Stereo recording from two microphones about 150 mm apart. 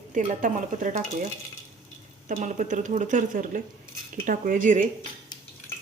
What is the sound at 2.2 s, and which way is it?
A woman's voice, 55° right (ahead or behind).